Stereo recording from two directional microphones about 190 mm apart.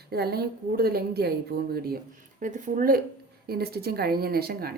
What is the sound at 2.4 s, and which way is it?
A woman's voice, 45° right (ahead or behind).